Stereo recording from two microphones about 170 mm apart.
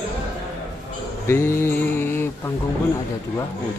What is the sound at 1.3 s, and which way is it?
Mantra, 15° left (ahead or behind).